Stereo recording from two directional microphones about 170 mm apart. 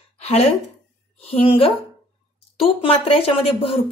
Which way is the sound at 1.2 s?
35° left (ahead or behind).